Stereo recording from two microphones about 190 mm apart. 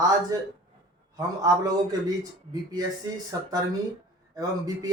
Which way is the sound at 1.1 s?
20° right (ahead or behind).